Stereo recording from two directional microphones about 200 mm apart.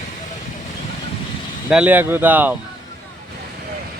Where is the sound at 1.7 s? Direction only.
5° right (ahead or behind).